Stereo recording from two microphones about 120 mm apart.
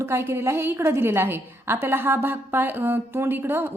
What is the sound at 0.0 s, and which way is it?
A woman's voice, 20° right (ahead or behind).